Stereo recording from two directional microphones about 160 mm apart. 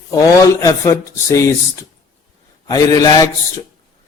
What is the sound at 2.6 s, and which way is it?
Speech, 20° left (ahead or behind).